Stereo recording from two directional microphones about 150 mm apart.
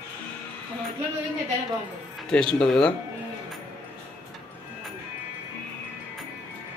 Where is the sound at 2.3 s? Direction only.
5° left (ahead or behind).